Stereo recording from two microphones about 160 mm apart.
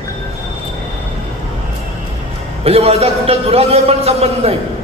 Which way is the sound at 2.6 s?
40° right (ahead or behind).